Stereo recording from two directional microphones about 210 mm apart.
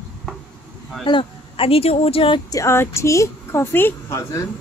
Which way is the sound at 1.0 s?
25° left (ahead or behind).